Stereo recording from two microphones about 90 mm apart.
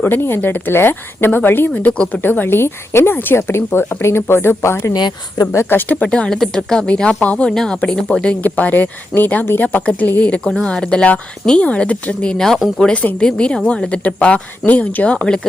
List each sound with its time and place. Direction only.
0.0 s speech: 25° left (ahead or behind)
1.7 s speech: 10° left (ahead or behind); by 4.9 s 30° left (ahead or behind)
4.9 s speech: 50° left (ahead or behind)
5.5 s a woman's voice: 25° left (ahead or behind); by 12.5 s 10° left (ahead or behind)
12.5 s speech: centre (ahead or behind)
12.8 s a woman's voice: 15° left (ahead or behind)